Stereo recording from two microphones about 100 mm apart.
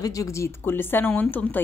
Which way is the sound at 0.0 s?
35° left (ahead or behind).